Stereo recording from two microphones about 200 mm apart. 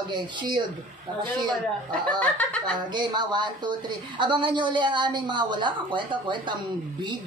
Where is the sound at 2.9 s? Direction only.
20° right (ahead or behind).